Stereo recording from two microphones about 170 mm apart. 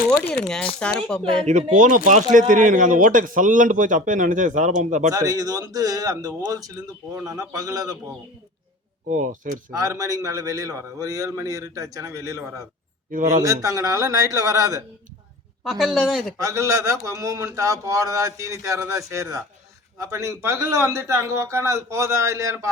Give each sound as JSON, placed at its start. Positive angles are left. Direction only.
{"t": 0.4, "sound": "speech", "side_deg": 5}
{"t": 1.7, "sound": "a man's voice", "side_deg": -45}
{"t": 5.1, "sound": "a man's voice", "side_deg": -20}
{"t": 9.0, "sound": "a man's voice", "side_deg": -50}
{"t": 9.7, "sound": "a man's voice", "side_deg": -20}
{"t": 13.1, "sound": "a man's voice", "side_deg": -50}
{"t": 13.4, "sound": "a man's voice", "side_deg": -20}
{"t": 15.6, "sound": "speech", "side_deg": 0}
{"t": 16.4, "sound": "a man's voice", "side_deg": -20}